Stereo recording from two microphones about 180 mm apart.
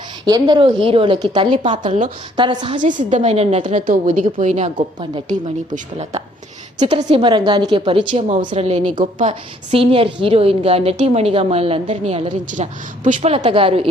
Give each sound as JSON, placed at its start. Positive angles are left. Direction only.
{"t": 0.3, "sound": "a woman's voice", "side_deg": -25}
{"t": 3.1, "sound": "a woman's voice", "side_deg": -40}
{"t": 6.8, "sound": "a woman's voice", "side_deg": -30}
{"t": 13.4, "sound": "a woman's voice", "side_deg": -30}